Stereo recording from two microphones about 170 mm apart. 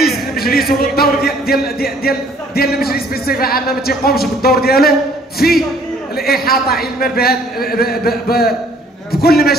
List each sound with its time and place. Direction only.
0.4 s speech: 60° left (ahead or behind)